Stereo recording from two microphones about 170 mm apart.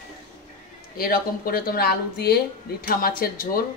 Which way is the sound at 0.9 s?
60° left (ahead or behind).